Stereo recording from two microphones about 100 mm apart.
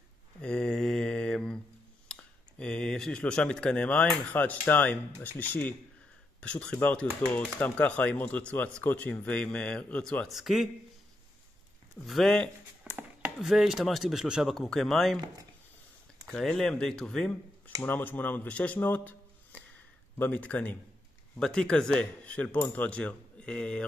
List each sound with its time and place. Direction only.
0.4 s mantra: 10° left (ahead or behind)
2.0 s a sound: 10° left (ahead or behind)
4.3 s speech: 15° left (ahead or behind)
10.2 s speech: centre (ahead or behind)
12.1 s speech: 5° left (ahead or behind)
12.9 s chopping: 10° right (ahead or behind)
13.4 s speech: centre (ahead or behind)
16.3 s speech: 5° left (ahead or behind)
17.8 s speech: 20° left (ahead or behind)